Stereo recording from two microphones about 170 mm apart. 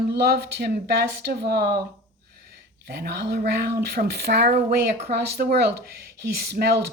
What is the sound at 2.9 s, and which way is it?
Speech, 70° right (ahead or behind).